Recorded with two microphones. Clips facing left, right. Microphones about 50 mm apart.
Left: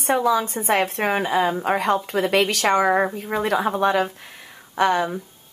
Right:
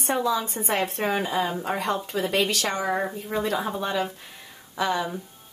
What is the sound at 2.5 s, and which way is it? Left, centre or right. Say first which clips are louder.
A woman's voice: left 7 dB; left.